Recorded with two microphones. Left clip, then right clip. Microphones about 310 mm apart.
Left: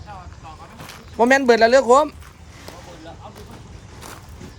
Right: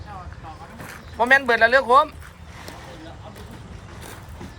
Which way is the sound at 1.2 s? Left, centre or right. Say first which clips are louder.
Left 2 dB; left.